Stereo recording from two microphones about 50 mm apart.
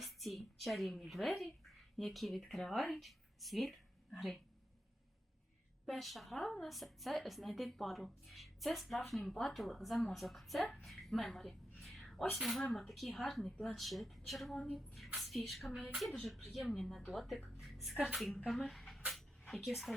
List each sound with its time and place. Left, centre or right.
0.0 s a woman's voice: centre
5.8 s a woman's voice: centre
11.8 s a sound: centre
12.7 s a woman's voice: centre
14.5 s speech: centre
14.9 s a woman's voice: centre
17.6 s a sound: centre
17.9 s a woman's voice: centre
18.4 s speech: centre
19.1 s a sound: centre